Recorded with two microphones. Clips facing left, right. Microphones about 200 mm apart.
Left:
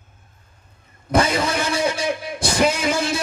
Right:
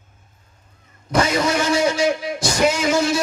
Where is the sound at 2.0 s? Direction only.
55° left (ahead or behind).